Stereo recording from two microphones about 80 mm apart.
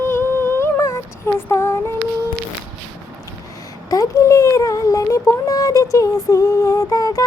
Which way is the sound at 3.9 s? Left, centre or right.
Left.